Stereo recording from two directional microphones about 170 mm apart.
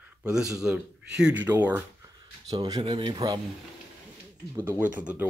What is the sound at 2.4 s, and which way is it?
Speech, 20° right (ahead or behind).